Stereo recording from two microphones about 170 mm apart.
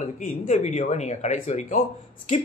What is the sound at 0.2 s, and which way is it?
A man's voice, 45° left (ahead or behind).